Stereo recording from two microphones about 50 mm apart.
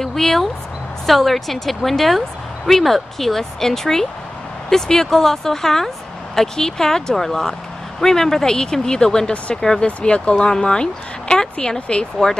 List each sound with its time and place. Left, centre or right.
0.0 s a woman's voice: centre
9.8 s speech: left